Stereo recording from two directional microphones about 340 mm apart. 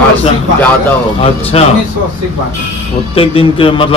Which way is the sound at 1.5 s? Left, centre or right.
Centre.